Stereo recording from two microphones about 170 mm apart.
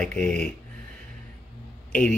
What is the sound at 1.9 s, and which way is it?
Speech, 5° left (ahead or behind).